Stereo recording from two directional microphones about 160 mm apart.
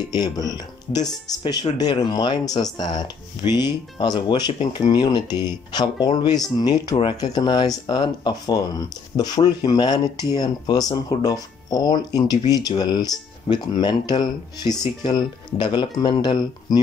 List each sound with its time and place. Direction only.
0.1 s speech: 25° left (ahead or behind)